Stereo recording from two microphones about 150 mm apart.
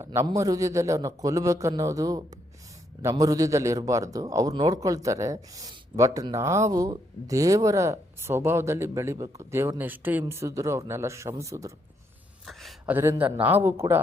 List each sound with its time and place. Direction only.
0.3 s a man's voice: 25° right (ahead or behind)
12.5 s a sound: centre (ahead or behind)
12.8 s a man's voice: 15° right (ahead or behind)